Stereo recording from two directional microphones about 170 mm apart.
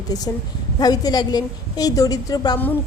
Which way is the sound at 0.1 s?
25° left (ahead or behind).